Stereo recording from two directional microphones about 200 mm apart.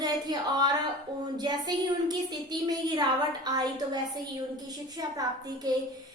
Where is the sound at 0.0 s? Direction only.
20° right (ahead or behind).